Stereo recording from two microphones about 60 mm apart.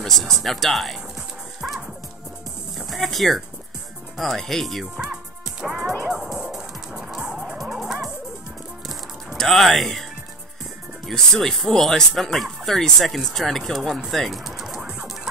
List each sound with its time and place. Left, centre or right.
0.0 s speech: centre
2.9 s speech: centre
5.0 s music: centre
9.4 s speech: centre
11.1 s speech: centre
14.8 s music: centre